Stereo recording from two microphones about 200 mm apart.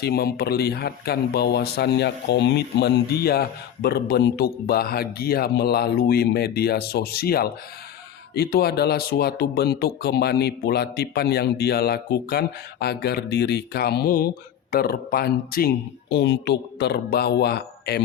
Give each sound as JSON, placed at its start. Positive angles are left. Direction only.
{"t": 0.0, "sound": "speech", "side_deg": 50}